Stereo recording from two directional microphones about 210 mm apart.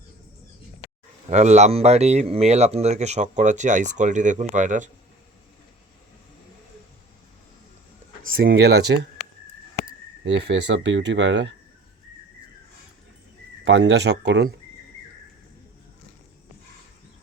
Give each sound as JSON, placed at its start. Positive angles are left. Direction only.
{"t": 1.3, "sound": "speech", "side_deg": -35}
{"t": 8.3, "sound": "speech", "side_deg": -45}
{"t": 10.2, "sound": "speech", "side_deg": -55}
{"t": 13.7, "sound": "speech", "side_deg": -60}